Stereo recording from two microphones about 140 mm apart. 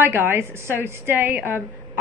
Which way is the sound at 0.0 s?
15° right (ahead or behind).